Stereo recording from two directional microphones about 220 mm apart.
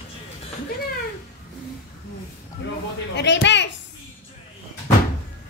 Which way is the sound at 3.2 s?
55° left (ahead or behind).